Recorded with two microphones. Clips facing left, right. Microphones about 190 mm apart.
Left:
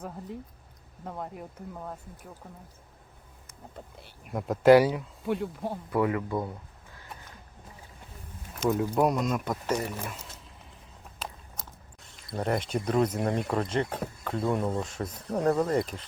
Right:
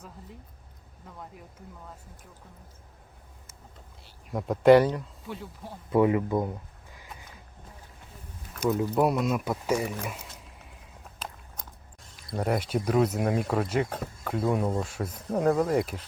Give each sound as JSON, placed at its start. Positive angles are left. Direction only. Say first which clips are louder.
{"t": 1.0, "sound": "speech", "louder": "left 8 dB", "side_deg": 55}
{"t": 4.3, "sound": "speech", "louder": "right 1 dB", "side_deg": 0}
{"t": 5.2, "sound": "speech", "louder": "left 9 dB", "side_deg": 60}
{"t": 5.9, "sound": "speech", "louder": "right 5 dB", "side_deg": -20}
{"t": 6.9, "sound": "a sound", "louder": "even", "side_deg": -10}
{"t": 8.6, "sound": "speech", "louder": "even", "side_deg": 0}
{"t": 12.3, "sound": "speech", "louder": "right 1 dB", "side_deg": -5}